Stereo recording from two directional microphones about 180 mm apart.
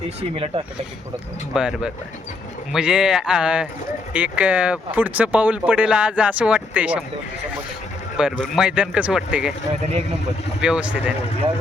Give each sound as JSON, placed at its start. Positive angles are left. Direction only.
{"t": 0.2, "sound": "speech", "side_deg": -35}
{"t": 1.5, "sound": "speech", "side_deg": -5}
{"t": 8.1, "sound": "speech", "side_deg": 0}
{"t": 10.6, "sound": "speech", "side_deg": -5}